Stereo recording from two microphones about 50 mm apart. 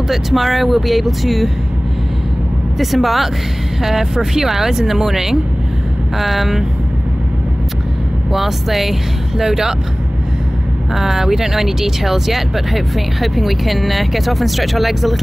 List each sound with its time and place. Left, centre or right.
0.1 s speech: centre
2.8 s speech: centre
8.3 s speech: centre
11.0 s speech: centre